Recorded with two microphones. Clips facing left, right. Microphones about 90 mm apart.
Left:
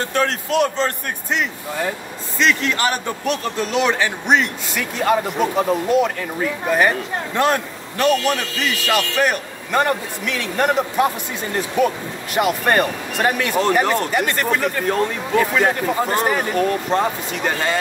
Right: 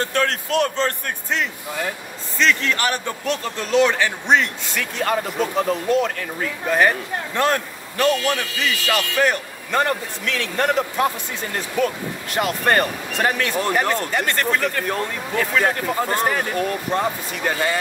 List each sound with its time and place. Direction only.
0.1 s a man's voice: 20° left (ahead or behind)
7.3 s a man's voice: 20° left (ahead or behind)